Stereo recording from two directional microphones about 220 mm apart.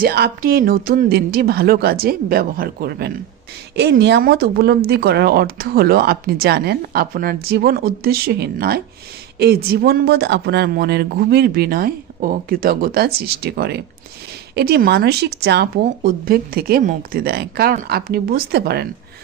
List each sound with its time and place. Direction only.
0.0 s speech: 45° right (ahead or behind)